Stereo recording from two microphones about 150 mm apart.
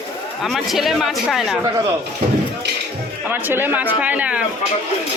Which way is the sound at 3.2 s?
15° right (ahead or behind).